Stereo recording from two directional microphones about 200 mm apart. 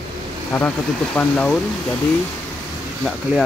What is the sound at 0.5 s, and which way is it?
Speech, 10° left (ahead or behind).